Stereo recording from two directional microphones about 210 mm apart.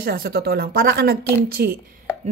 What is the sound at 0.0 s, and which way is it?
A woman's voice, 45° right (ahead or behind).